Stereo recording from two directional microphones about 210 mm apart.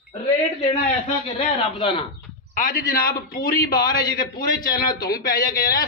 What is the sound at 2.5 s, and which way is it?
A man's voice, 45° left (ahead or behind).